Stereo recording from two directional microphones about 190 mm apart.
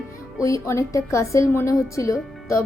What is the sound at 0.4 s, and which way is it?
A woman's voice, 15° left (ahead or behind).